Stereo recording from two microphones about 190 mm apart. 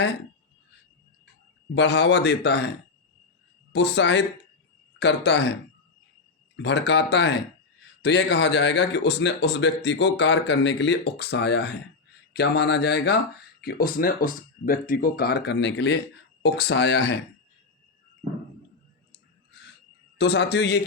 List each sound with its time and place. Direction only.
1.7 s speech: 65° left (ahead or behind)
6.6 s speech: 65° left (ahead or behind)
13.6 s speech: 50° left (ahead or behind)
20.1 s speech: 60° left (ahead or behind)